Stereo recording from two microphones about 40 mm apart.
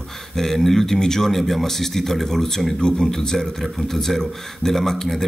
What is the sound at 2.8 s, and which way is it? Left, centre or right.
Speech, left.